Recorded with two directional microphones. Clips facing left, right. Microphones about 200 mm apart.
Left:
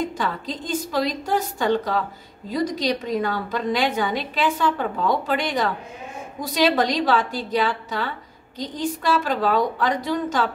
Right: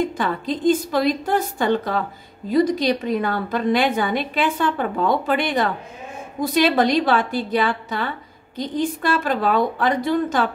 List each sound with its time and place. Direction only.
0.2 s a woman's voice: 55° right (ahead or behind)